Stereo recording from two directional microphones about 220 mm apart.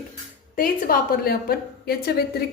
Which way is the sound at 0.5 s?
40° left (ahead or behind).